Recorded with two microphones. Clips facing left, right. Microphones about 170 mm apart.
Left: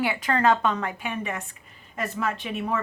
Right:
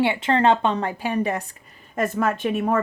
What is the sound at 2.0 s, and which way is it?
Speech, 50° right (ahead or behind).